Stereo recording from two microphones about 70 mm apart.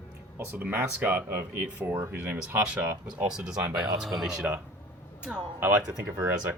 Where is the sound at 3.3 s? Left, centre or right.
Centre.